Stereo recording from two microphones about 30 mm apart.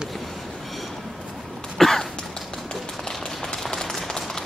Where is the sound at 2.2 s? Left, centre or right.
Centre.